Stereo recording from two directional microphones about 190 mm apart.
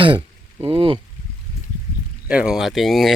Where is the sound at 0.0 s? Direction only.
30° right (ahead or behind).